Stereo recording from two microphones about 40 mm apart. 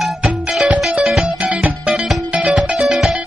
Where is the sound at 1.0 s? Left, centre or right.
Centre.